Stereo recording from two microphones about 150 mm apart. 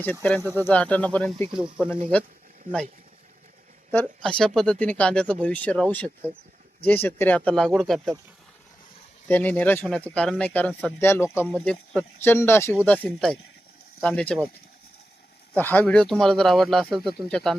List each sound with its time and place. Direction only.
0.0 s speech: 10° left (ahead or behind)
1.5 s speech: 5° right (ahead or behind)
4.0 s speech: 5° left (ahead or behind)
9.2 s speech: 10° left (ahead or behind)
11.4 s speech: 5° left (ahead or behind)
15.5 s speech: 10° left (ahead or behind)